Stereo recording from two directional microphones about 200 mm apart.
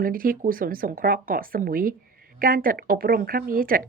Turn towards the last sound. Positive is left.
turn(degrees=-45)  # may be behind; listen again after turning